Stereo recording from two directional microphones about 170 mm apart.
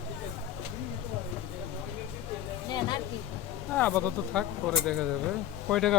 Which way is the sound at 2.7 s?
25° left (ahead or behind).